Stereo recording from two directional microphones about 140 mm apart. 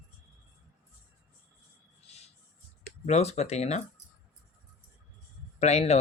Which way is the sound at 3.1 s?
50° left (ahead or behind).